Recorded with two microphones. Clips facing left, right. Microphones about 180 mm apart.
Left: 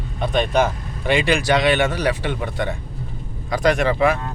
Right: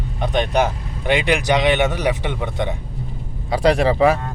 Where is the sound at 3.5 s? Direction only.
30° right (ahead or behind).